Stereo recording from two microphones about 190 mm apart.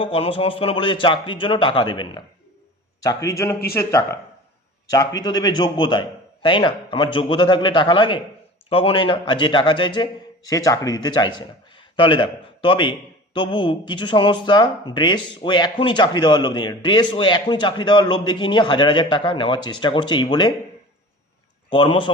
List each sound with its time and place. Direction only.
0.0 s a man's voice: 30° left (ahead or behind)
21.7 s speech: 25° left (ahead or behind)